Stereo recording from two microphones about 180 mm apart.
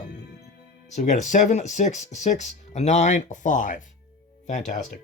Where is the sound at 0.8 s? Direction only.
40° left (ahead or behind).